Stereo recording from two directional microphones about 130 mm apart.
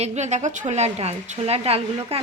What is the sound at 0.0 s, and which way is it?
A woman's voice, 60° right (ahead or behind).